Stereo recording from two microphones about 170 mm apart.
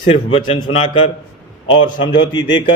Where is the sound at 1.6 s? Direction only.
30° left (ahead or behind).